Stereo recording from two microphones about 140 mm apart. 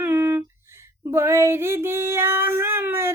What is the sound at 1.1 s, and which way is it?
Child singing, 20° right (ahead or behind).